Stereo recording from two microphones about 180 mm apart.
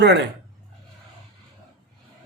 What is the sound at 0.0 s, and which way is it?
Speech, 70° right (ahead or behind).